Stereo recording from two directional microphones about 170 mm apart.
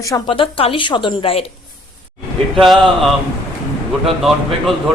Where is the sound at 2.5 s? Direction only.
Centre (ahead or behind).